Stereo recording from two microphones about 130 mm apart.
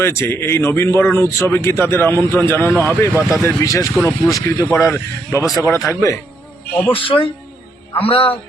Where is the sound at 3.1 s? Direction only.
25° right (ahead or behind).